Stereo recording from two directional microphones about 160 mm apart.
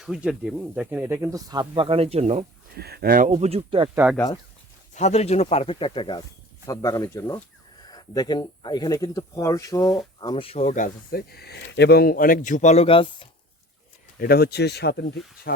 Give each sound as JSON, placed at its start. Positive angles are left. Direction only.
{"t": 0.0, "sound": "speech", "side_deg": -5}
{"t": 2.7, "sound": "speech", "side_deg": -75}
{"t": 3.3, "sound": "speech", "side_deg": -40}
{"t": 3.9, "sound": "speech", "side_deg": -10}
{"t": 4.9, "sound": "speech", "side_deg": 45}
{"t": 10.2, "sound": "speech", "side_deg": 30}
{"t": 14.2, "sound": "speech", "side_deg": 75}